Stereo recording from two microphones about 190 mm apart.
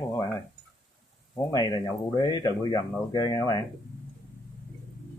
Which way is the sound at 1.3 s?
20° left (ahead or behind).